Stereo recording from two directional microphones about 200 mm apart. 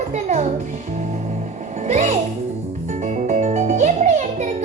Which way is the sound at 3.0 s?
40° right (ahead or behind).